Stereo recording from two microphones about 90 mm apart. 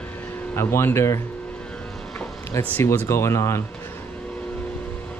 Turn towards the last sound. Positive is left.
turn(degrees=30)  # may be behind; listen again after turning